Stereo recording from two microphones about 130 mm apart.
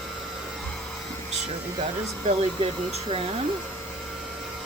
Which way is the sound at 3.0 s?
45° right (ahead or behind).